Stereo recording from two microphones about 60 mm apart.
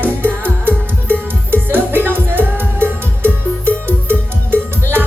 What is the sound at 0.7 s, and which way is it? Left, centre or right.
Music, right.